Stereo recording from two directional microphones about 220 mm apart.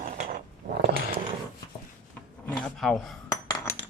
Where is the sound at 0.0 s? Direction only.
35° right (ahead or behind).